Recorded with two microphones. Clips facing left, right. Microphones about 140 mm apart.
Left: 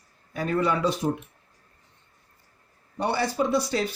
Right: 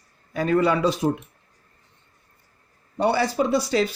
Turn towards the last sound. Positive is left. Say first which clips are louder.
# right 3 dB
turn(degrees=-90)